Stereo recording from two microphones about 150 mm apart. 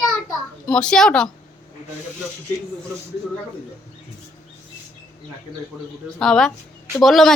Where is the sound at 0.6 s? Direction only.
5° left (ahead or behind).